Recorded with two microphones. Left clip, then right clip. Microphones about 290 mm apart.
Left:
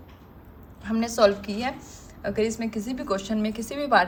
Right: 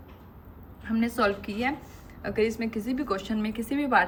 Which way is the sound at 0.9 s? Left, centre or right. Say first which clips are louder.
Left 5 dB; centre.